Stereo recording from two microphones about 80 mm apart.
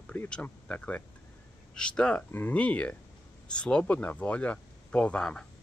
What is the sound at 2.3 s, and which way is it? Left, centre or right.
Speech, left.